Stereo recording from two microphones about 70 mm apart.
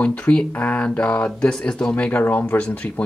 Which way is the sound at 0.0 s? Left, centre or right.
Centre.